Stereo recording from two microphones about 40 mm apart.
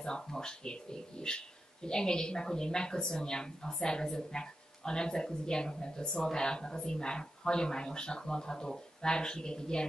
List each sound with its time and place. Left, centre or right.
0.0 s speech: centre